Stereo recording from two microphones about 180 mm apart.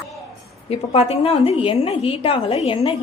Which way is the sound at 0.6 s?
35° left (ahead or behind).